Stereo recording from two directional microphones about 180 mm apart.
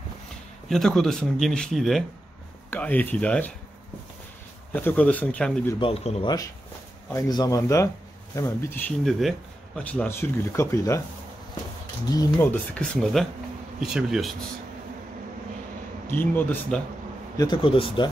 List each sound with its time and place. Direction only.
0.7 s speech: centre (ahead or behind)
4.7 s speech: 10° left (ahead or behind)
5.8 s a man's voice: 35° left (ahead or behind)
7.2 s speech: 20° left (ahead or behind)
12.2 s speech: 10° left (ahead or behind)
16.1 s speech: 10° left (ahead or behind)
17.4 s speech: 25° left (ahead or behind)